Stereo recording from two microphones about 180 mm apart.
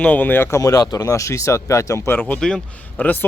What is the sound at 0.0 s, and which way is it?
Speech, 10° left (ahead or behind).